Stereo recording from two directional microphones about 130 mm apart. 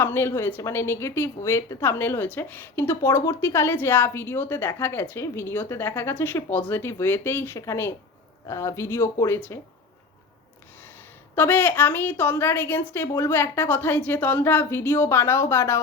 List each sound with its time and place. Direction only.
0.0 s a woman's voice: 20° left (ahead or behind)
11.3 s a woman's voice: 15° left (ahead or behind)